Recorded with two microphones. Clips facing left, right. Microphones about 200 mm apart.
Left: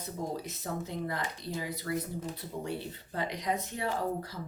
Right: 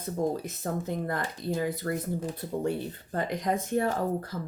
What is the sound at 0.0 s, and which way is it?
Speech, 50° right (ahead or behind).